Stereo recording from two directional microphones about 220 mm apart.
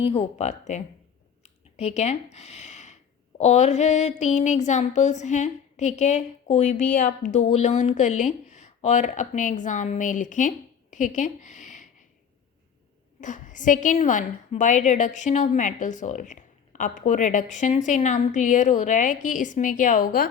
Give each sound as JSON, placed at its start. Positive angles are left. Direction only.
{"t": 0.0, "sound": "a woman's voice", "side_deg": 25}
{"t": 10.9, "sound": "a sound", "side_deg": 35}
{"t": 13.2, "sound": "a woman's voice", "side_deg": 35}